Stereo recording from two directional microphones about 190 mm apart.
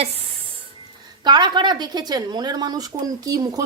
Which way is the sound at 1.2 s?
20° right (ahead or behind).